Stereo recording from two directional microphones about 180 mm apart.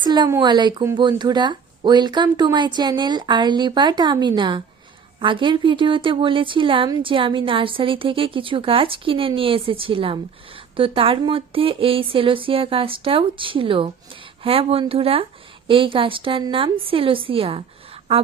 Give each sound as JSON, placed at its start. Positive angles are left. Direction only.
{"t": 0.0, "sound": "speech", "side_deg": -25}